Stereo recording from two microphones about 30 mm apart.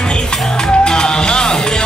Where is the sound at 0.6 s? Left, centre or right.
Left.